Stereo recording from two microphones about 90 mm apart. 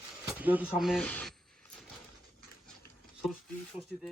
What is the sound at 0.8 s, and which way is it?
Speech, 5° right (ahead or behind).